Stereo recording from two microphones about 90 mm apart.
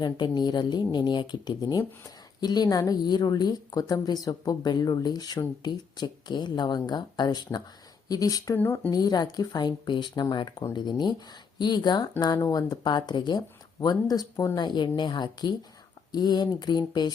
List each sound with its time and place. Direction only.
0.0 s speech: 55° left (ahead or behind)
8.5 s speech: 20° left (ahead or behind)
8.9 s speech: 45° left (ahead or behind)
12.4 s speech: 40° left (ahead or behind)
13.7 s speech: 45° left (ahead or behind)
14.6 s a woman's voice: 55° left (ahead or behind)